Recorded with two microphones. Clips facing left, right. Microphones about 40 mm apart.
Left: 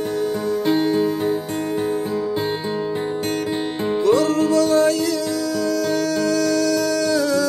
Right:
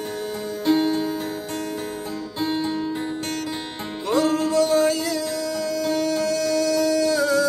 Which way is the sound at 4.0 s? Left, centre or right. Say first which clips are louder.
Left 3 dB; centre.